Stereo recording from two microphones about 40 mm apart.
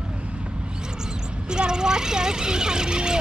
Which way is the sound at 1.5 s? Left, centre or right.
Centre.